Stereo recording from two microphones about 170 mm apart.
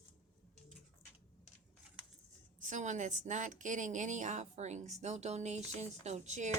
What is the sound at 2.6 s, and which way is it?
A woman's voice, 45° right (ahead or behind).